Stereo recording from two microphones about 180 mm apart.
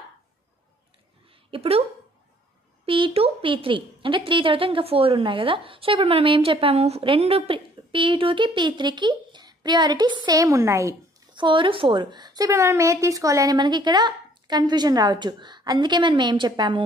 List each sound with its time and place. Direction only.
1.5 s a woman's voice: 35° right (ahead or behind)